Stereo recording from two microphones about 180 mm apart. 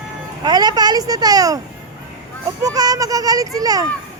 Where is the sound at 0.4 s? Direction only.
20° right (ahead or behind).